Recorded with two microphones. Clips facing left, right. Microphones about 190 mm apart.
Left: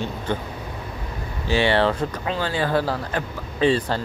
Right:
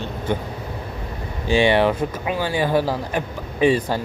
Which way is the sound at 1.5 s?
15° right (ahead or behind).